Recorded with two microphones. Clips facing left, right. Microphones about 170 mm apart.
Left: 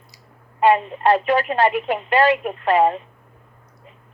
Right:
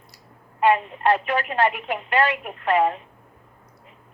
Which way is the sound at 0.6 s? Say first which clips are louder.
Left 3 dB; 35° left (ahead or behind).